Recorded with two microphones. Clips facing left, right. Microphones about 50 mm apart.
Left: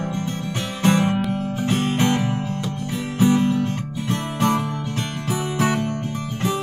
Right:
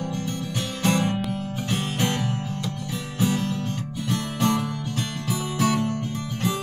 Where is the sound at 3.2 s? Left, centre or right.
Left.